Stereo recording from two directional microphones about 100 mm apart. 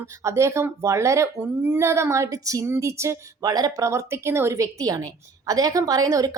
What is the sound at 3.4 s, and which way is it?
A woman's voice, 40° right (ahead or behind).